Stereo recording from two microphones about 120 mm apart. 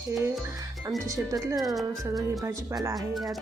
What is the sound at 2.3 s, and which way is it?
Speech, 30° right (ahead or behind).